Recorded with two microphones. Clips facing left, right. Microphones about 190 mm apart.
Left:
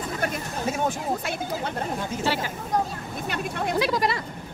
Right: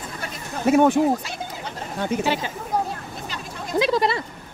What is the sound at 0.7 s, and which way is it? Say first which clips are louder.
Speech: right 12 dB; 65° right (ahead or behind).